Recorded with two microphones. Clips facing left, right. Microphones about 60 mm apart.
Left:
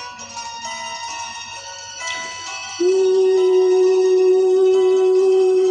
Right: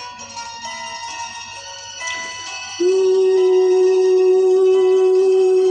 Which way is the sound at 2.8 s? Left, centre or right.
Right.